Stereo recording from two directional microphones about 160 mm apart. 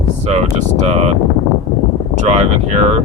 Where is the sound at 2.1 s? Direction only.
45° right (ahead or behind).